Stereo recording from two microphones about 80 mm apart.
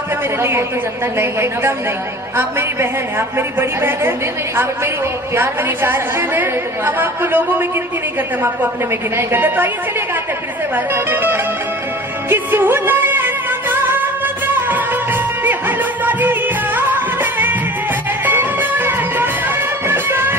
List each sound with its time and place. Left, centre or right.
1.2 s a woman's voice: right
3.2 s a woman's voice: right
5.3 s a woman's voice: right
9.1 s a woman's voice: right
10.9 s speech: right
12.3 s music: right